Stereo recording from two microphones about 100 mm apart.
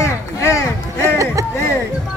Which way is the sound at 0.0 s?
30° left (ahead or behind).